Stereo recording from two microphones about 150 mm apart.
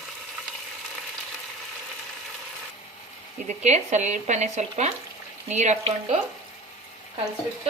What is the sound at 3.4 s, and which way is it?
Speech, 50° right (ahead or behind).